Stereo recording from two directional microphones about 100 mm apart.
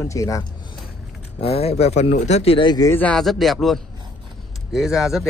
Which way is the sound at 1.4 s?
90° left.